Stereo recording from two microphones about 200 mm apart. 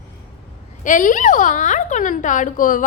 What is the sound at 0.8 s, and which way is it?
A woman's voice, 40° left (ahead or behind).